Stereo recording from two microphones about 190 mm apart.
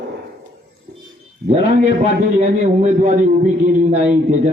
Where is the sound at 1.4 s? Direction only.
55° right (ahead or behind).